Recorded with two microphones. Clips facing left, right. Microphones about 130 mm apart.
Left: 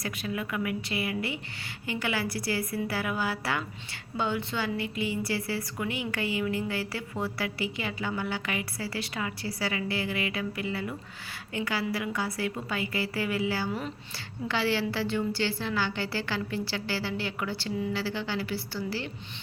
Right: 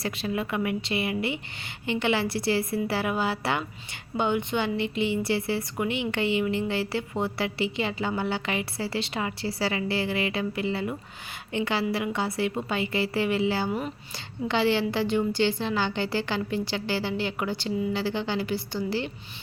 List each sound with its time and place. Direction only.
0.0 s a woman's voice: 25° right (ahead or behind)